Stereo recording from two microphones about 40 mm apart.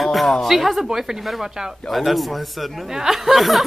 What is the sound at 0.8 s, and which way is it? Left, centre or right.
Speech, centre.